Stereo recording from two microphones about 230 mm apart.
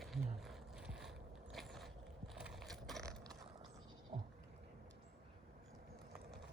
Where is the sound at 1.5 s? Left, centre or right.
Centre.